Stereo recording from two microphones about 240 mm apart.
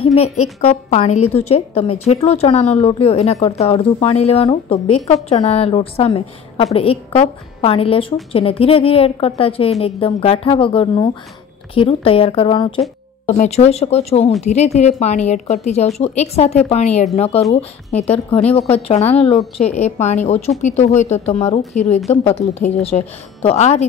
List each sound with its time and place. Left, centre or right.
0.0 s a woman's voice: left